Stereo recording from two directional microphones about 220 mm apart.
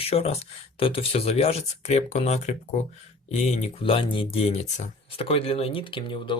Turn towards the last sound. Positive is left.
turn(degrees=20)  # may be behind; listen again after turning